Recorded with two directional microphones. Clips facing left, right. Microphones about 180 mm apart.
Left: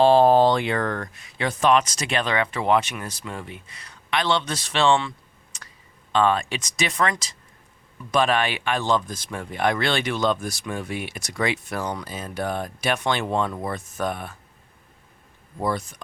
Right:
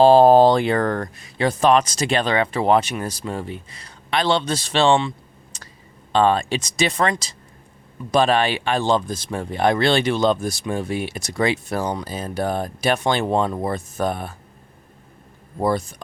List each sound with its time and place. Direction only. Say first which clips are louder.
0.0 s speech: right 4 dB; 35° right (ahead or behind)
6.1 s speech: right 3 dB; 30° right (ahead or behind)
15.5 s speech: right 5 dB; 30° right (ahead or behind)